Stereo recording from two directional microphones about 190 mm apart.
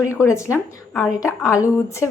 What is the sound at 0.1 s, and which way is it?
A woman's voice, 15° left (ahead or behind).